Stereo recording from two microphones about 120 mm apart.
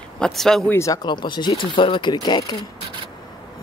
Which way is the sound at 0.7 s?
25° left (ahead or behind).